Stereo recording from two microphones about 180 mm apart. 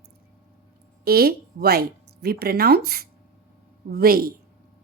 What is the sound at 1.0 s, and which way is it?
A woman's voice, 55° right (ahead or behind).